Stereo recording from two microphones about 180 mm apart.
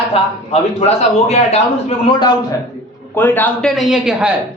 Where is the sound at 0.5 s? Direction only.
35° left (ahead or behind).